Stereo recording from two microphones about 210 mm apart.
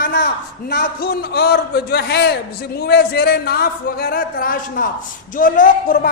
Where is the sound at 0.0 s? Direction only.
50° left (ahead or behind).